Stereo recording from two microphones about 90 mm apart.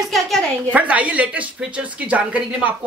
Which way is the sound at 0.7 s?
15° right (ahead or behind).